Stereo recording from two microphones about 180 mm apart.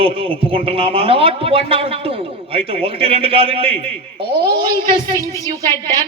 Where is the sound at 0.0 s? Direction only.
30° right (ahead or behind).